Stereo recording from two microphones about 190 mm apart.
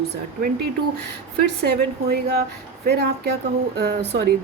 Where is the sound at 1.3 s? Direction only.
55° right (ahead or behind).